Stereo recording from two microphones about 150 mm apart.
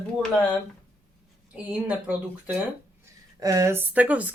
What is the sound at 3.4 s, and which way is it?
Speech, 20° right (ahead or behind).